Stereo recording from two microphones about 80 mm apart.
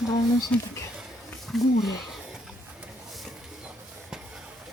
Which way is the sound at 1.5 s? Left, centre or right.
Centre.